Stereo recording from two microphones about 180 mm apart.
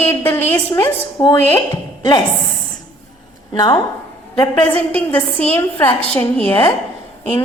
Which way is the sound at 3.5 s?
20° left (ahead or behind).